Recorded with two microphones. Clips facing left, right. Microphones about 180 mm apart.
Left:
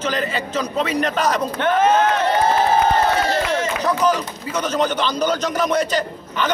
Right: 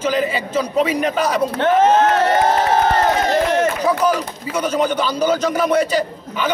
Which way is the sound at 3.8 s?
10° right (ahead or behind).